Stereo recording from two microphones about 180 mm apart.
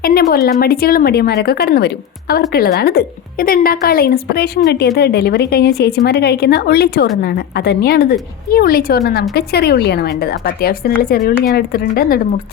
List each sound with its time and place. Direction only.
0.0 s a woman's voice: 60° left (ahead or behind)